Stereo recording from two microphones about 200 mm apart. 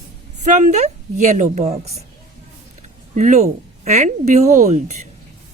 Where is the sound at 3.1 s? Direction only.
35° right (ahead or behind).